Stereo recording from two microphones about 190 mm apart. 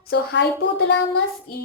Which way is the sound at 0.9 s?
65° left (ahead or behind).